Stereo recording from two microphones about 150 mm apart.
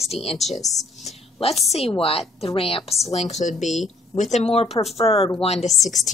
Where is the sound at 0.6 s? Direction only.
25° left (ahead or behind).